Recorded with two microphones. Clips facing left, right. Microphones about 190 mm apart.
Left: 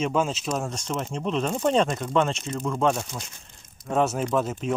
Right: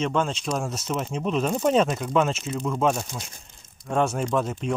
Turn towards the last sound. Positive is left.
turn(degrees=0)  # may be behind; listen again after turning